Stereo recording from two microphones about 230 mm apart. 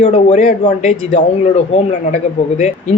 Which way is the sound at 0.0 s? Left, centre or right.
Left.